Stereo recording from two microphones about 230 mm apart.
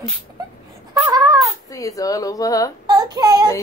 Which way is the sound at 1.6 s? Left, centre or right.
Centre.